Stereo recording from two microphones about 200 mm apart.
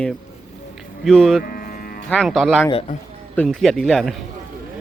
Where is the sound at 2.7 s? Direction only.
30° left (ahead or behind).